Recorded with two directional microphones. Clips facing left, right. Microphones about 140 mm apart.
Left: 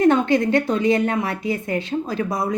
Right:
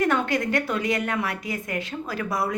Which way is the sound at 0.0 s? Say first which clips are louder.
Left 7 dB; 25° left (ahead or behind).